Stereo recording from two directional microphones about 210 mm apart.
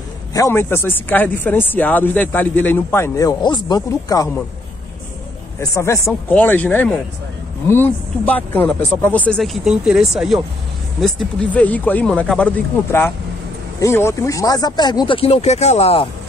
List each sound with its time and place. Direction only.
0.3 s speech: 15° left (ahead or behind)
5.6 s speech: 15° left (ahead or behind)